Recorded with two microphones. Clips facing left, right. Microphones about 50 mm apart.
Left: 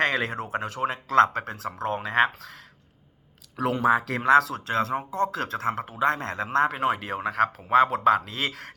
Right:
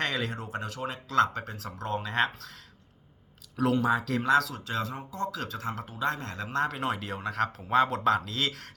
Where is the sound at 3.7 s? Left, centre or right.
Left.